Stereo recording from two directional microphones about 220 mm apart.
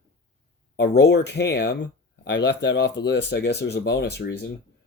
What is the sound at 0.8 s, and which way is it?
Speech, 50° left (ahead or behind).